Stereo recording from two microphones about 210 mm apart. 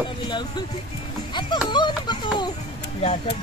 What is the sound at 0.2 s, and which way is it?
Speech, 20° left (ahead or behind).